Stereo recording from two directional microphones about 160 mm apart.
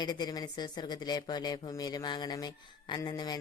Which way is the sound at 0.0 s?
25° left (ahead or behind).